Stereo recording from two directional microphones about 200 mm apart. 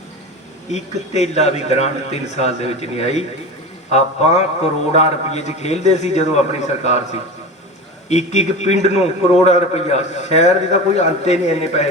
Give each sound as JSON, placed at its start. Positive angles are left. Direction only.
{"t": 0.7, "sound": "a man's voice", "side_deg": 35}